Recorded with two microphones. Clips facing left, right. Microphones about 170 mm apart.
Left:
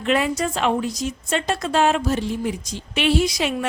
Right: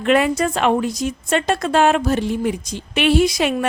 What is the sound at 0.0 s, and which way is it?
A woman's voice, 60° right (ahead or behind).